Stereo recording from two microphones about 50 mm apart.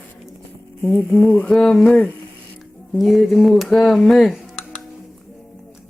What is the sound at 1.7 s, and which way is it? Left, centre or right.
Speech, centre.